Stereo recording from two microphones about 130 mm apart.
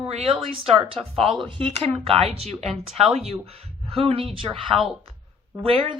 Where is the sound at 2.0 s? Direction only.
50° right (ahead or behind).